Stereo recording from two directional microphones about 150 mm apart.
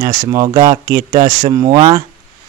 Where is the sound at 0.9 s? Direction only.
80° right.